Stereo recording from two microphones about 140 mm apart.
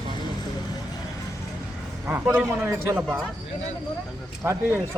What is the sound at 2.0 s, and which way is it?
A man's voice, 15° right (ahead or behind).